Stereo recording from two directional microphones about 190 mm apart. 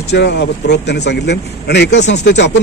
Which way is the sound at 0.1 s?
65° left (ahead or behind).